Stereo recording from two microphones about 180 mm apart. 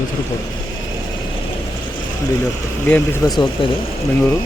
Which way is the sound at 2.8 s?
10° left (ahead or behind).